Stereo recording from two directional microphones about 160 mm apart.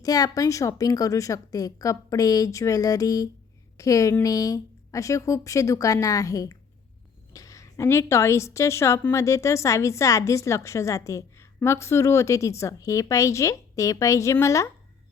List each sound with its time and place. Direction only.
0.0 s a woman's voice: 25° left (ahead or behind)